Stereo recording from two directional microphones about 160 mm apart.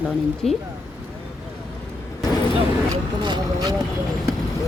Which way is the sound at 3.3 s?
25° right (ahead or behind).